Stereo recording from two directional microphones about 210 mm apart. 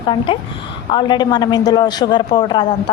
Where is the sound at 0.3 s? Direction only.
25° left (ahead or behind).